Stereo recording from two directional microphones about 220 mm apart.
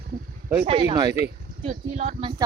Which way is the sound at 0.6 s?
25° right (ahead or behind).